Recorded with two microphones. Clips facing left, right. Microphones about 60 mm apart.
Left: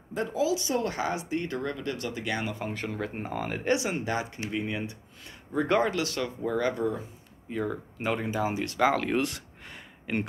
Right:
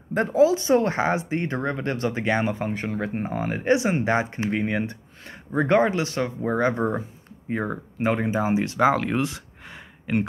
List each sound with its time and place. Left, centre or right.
0.3 s speech: right
2.9 s speech: centre
3.7 s speech: right
8.9 s a sound: centre